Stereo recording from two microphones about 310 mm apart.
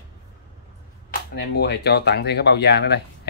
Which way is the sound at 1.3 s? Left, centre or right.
Left.